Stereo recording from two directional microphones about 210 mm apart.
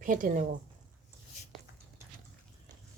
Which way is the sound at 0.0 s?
40° right (ahead or behind).